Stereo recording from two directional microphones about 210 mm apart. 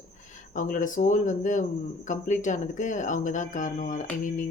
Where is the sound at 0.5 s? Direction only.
40° left (ahead or behind).